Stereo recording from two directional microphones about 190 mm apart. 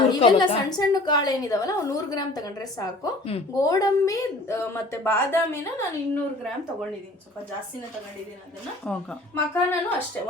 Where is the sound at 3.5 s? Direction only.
20° left (ahead or behind).